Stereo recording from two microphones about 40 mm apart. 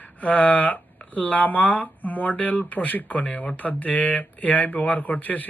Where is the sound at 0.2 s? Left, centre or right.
Left.